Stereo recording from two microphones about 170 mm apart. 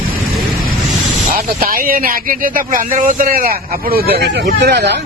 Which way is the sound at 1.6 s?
60° right (ahead or behind).